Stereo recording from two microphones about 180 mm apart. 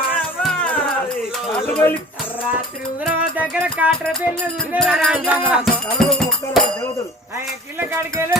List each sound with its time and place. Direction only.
0.4 s music: 5° left (ahead or behind)
1.7 s speech: 10° left (ahead or behind)
3.0 s music: 10° right (ahead or behind)
6.0 s music: 5° left (ahead or behind)
7.8 s music: 15° right (ahead or behind)